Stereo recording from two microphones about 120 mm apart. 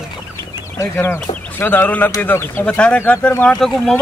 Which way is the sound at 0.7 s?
20° left (ahead or behind).